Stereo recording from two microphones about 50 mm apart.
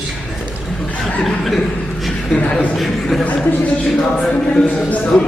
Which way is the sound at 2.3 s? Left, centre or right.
Left.